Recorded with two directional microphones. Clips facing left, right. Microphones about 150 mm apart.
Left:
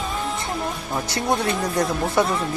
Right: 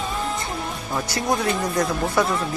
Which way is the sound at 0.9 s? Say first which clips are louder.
Even; 25° left (ahead or behind).